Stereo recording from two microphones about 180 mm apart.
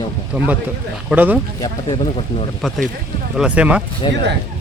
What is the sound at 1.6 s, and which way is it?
Speech, 25° left (ahead or behind).